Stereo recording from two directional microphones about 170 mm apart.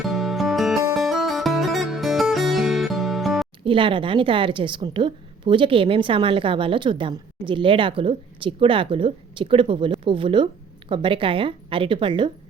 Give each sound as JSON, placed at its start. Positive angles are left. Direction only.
{"t": 0.1, "sound": "music", "side_deg": 0}
{"t": 3.6, "sound": "a woman's voice", "side_deg": -30}